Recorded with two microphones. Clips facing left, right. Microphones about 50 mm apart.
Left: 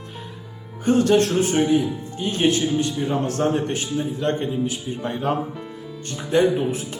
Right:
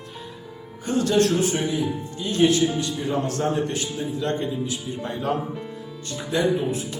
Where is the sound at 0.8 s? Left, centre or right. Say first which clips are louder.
Left 3 dB; left.